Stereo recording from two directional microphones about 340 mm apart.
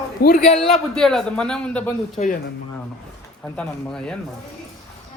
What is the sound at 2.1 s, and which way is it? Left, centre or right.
Speech, left.